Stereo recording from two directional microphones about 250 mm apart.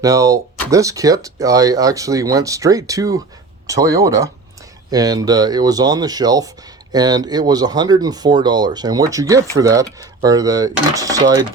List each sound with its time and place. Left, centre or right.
0.0 s speech: centre